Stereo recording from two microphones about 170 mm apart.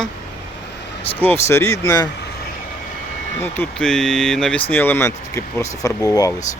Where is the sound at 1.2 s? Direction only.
15° left (ahead or behind).